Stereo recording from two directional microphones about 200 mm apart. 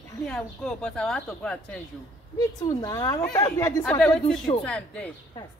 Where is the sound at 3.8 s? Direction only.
5° left (ahead or behind).